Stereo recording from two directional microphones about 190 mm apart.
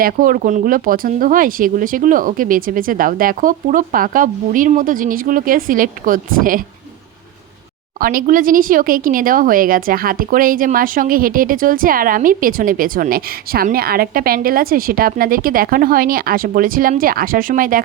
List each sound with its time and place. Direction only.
0.0 s speech: 50° right (ahead or behind)
7.9 s speech: 50° right (ahead or behind)